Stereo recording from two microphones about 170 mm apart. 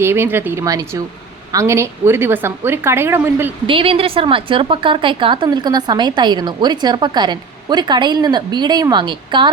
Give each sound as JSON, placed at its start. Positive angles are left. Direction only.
{"t": 0.0, "sound": "a woman's voice", "side_deg": -15}
{"t": 3.7, "sound": "a woman's voice", "side_deg": -30}